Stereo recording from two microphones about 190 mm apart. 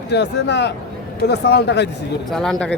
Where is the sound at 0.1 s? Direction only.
65° left (ahead or behind).